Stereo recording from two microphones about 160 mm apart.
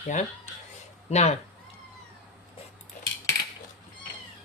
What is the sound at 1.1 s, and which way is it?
Speech, 45° left (ahead or behind).